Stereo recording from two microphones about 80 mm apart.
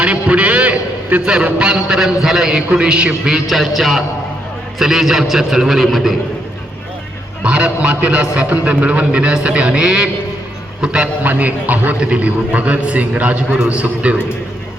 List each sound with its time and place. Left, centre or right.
0.0 s a sound: centre
1.5 s a man's voice: centre
7.4 s a man's voice: centre